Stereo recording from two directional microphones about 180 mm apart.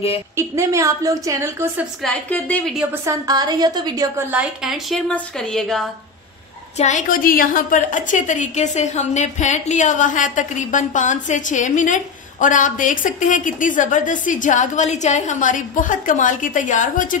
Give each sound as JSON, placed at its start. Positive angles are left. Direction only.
{"t": 0.4, "sound": "a woman's voice", "side_deg": -15}
{"t": 2.0, "sound": "a woman's voice", "side_deg": 10}
{"t": 2.9, "sound": "a woman's voice", "side_deg": -20}
{"t": 4.3, "sound": "a woman's voice", "side_deg": -5}
{"t": 6.8, "sound": "a woman's voice", "side_deg": 40}